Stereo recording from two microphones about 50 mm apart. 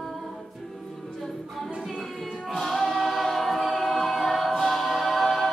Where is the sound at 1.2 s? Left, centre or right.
Centre.